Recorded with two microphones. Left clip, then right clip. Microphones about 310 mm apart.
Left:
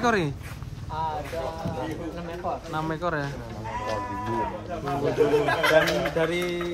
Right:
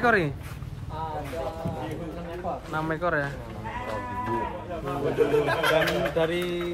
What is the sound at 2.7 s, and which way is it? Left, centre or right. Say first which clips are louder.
Speech: right 4 dB; centre.